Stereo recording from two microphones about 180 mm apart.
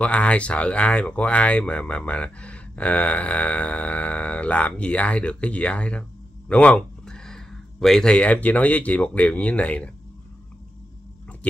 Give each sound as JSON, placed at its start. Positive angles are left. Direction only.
{"t": 0.0, "sound": "speech", "side_deg": 5}